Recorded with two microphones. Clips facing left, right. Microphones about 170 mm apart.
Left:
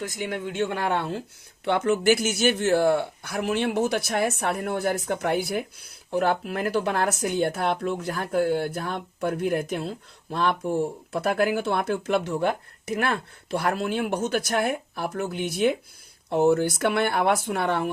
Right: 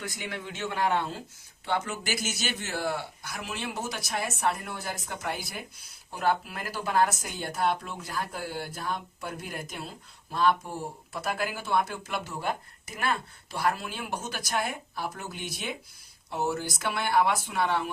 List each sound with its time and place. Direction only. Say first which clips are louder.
0.0 s speech: left 7 dB; 45° left (ahead or behind)